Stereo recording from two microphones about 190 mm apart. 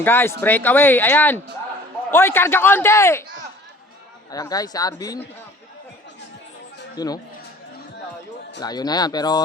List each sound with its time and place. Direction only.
0.0 s speech: 10° left (ahead or behind)
4.3 s speech: 20° left (ahead or behind)
6.9 s speech: 20° left (ahead or behind)
8.6 s speech: 20° left (ahead or behind)